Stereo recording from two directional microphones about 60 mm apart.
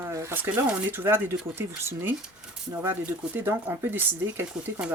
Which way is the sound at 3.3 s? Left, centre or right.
Right.